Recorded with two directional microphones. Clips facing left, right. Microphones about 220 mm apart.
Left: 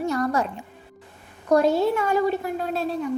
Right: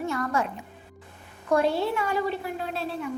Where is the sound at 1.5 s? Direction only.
40° left (ahead or behind).